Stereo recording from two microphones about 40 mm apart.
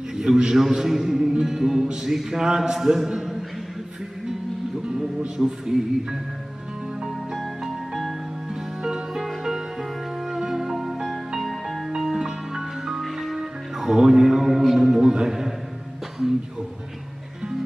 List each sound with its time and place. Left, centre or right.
0.1 s a man's voice: centre
3.1 s a sound: centre
4.8 s speech: right
7.6 s music: centre
12.0 s music: centre
14.2 s a man's voice: centre